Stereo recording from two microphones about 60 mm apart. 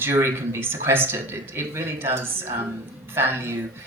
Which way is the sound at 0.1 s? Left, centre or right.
Right.